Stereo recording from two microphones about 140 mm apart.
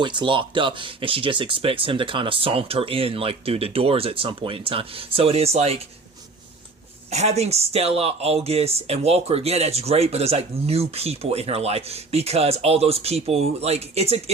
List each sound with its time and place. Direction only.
0.0 s speech: 35° right (ahead or behind)
7.1 s speech: 50° right (ahead or behind)